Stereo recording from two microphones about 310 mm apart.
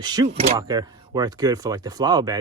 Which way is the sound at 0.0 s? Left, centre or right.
Centre.